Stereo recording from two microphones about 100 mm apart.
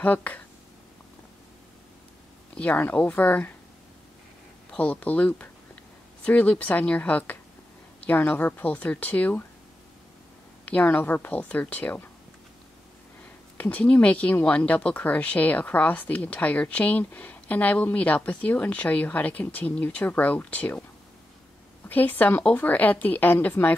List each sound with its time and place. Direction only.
0.0 s speech: 15° left (ahead or behind)
2.5 s speech: 15° left (ahead or behind)
4.6 s speech: 10° left (ahead or behind)
10.6 s speech: 15° left (ahead or behind)
13.6 s speech: 15° left (ahead or behind)
21.8 s speech: 20° left (ahead or behind)